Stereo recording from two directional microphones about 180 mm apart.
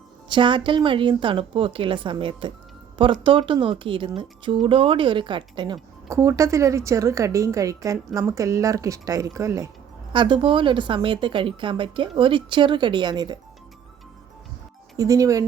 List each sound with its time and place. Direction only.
0.3 s a woman's voice: 25° right (ahead or behind)
10.1 s speech: 25° right (ahead or behind)
14.9 s speech: 20° right (ahead or behind)